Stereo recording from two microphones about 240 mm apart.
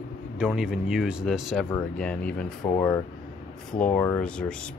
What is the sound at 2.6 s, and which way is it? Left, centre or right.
Speech, centre.